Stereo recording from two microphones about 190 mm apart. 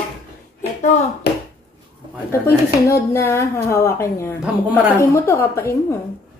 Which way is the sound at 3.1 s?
15° left (ahead or behind).